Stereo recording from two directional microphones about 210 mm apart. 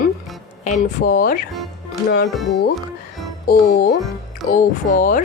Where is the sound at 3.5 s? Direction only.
45° left (ahead or behind).